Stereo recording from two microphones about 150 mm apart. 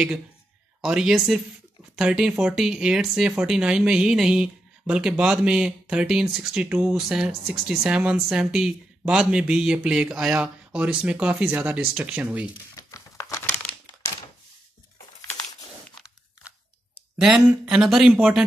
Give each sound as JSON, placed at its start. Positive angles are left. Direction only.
{"t": 0.7, "sound": "speech", "side_deg": -5}
{"t": 12.7, "sound": "crumpling", "side_deg": 20}
{"t": 17.2, "sound": "speech", "side_deg": -5}